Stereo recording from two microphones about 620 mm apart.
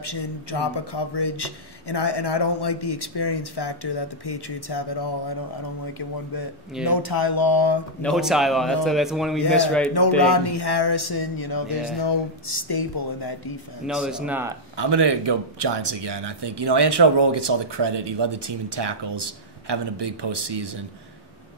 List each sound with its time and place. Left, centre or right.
0.0 s a man's voice: left
6.9 s a man's voice: left
8.0 s a man's voice: centre
9.9 s a man's voice: left
13.8 s a man's voice: centre
14.8 s speech: right